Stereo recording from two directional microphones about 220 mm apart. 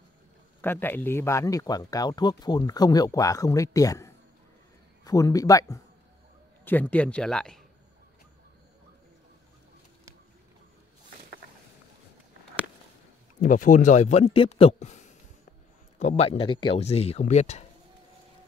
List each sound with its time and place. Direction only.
0.6 s a man's voice: 10° left (ahead or behind)
13.4 s a man's voice: 35° left (ahead or behind)